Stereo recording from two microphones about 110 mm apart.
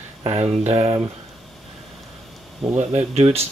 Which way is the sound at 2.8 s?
70° right (ahead or behind).